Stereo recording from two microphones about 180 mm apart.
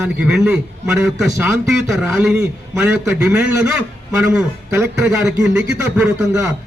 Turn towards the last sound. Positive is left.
turn(degrees=-15)  # may be behind; listen again after turning